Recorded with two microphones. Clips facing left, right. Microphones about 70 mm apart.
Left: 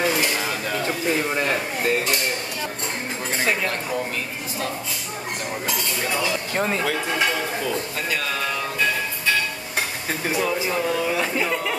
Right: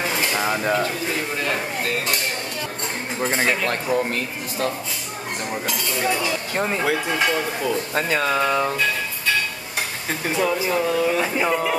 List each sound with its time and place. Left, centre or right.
0.3 s dishes: right
0.8 s speech: left
6.5 s speech: centre
7.9 s speech: right
10.0 s speech: centre
11.4 s a sound: centre